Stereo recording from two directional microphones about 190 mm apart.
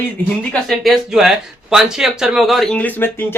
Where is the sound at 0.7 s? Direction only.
Centre (ahead or behind).